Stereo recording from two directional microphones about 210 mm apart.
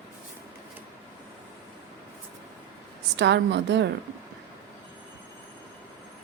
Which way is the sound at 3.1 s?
55° right (ahead or behind).